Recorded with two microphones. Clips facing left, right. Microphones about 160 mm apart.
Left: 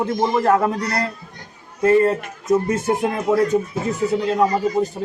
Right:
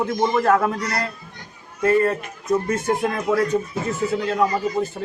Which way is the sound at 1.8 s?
20° left (ahead or behind).